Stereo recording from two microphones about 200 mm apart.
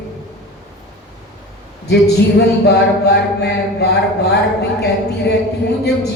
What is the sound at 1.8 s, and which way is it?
A man's voice, 55° left (ahead or behind).